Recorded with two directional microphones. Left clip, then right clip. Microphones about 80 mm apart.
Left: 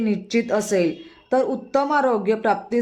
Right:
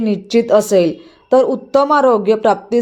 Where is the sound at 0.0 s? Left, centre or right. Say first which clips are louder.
Right 8 dB; right.